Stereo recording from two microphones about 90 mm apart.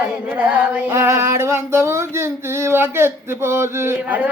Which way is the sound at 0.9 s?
30° right (ahead or behind).